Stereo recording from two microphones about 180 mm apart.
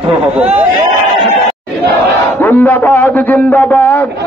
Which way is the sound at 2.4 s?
10° left (ahead or behind).